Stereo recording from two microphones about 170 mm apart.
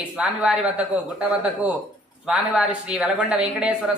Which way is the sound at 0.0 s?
5° right (ahead or behind).